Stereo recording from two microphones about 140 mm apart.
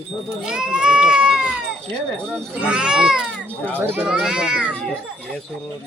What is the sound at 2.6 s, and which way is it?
Speech, 5° right (ahead or behind).